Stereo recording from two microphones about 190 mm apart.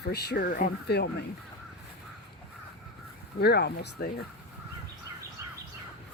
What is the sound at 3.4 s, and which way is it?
Speech, 60° left (ahead or behind).